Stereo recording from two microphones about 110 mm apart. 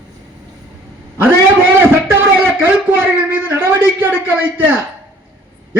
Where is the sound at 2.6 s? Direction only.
20° right (ahead or behind).